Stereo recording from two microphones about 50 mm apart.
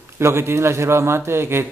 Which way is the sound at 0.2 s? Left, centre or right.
Right.